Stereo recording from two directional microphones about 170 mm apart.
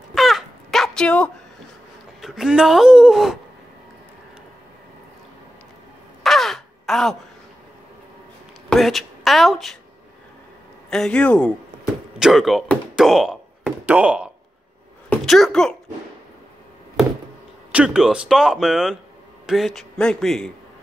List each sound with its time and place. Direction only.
0.1 s dog: centre (ahead or behind)
2.2 s speech: 5° right (ahead or behind)
6.2 s caw: centre (ahead or behind)
8.6 s a woman's voice: centre (ahead or behind)
10.9 s speech: 5° left (ahead or behind)
11.7 s a sound: 50° right (ahead or behind)
12.2 s speech: centre (ahead or behind)
17.7 s speech: 5° right (ahead or behind)